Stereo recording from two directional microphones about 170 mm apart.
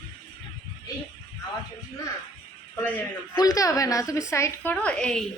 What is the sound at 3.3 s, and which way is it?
A woman's voice, 20° left (ahead or behind).